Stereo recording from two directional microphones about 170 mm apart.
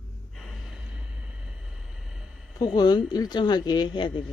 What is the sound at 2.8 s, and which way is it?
Speech, 25° left (ahead or behind).